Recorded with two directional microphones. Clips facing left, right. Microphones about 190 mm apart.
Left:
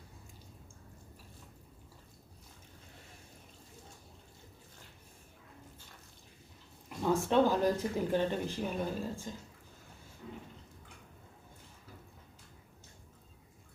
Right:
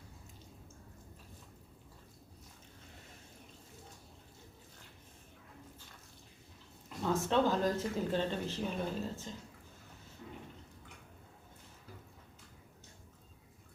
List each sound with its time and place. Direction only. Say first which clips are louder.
7.0 s speech: left 3 dB; 15° left (ahead or behind)